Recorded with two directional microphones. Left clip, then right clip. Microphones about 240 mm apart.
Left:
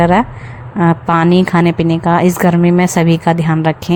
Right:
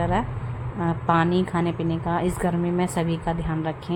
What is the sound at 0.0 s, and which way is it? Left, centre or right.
A woman's voice, left.